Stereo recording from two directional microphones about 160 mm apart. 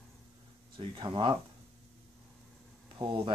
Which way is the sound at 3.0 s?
30° right (ahead or behind).